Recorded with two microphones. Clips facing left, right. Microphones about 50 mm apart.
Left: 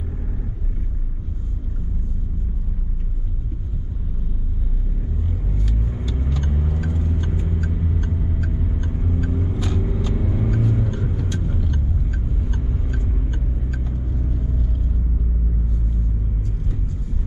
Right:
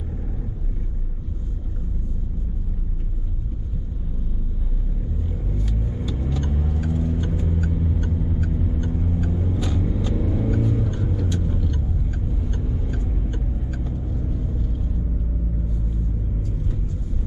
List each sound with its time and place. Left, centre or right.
6.5 s vehicle: centre